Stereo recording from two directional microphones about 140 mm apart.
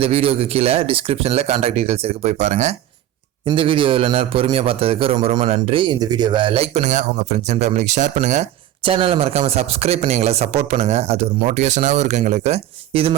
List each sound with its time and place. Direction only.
0.0 s speech: 45° right (ahead or behind)
3.4 s a man's voice: 40° right (ahead or behind); by 8.4 s 60° right (ahead or behind)
8.8 s speech: 40° right (ahead or behind)